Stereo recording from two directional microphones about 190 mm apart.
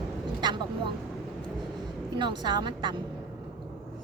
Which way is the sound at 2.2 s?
25° right (ahead or behind).